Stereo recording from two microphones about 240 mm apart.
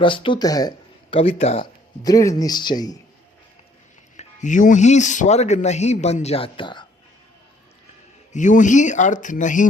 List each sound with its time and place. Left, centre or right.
0.0 s speech: left
2.0 s speech: centre
4.2 s speech: left
8.3 s speech: left